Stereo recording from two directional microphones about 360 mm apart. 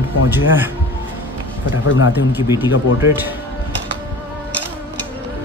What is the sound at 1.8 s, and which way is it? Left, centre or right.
Speech, left.